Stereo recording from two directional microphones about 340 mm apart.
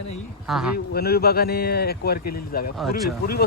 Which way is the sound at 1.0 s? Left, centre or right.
Left.